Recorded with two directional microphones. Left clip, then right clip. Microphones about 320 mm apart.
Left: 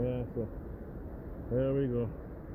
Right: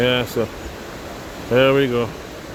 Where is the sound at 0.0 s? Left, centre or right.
Right.